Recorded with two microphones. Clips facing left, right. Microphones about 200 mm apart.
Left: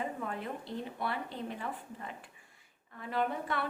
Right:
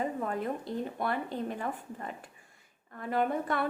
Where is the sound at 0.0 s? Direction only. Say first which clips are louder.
Right 5 dB; 40° right (ahead or behind).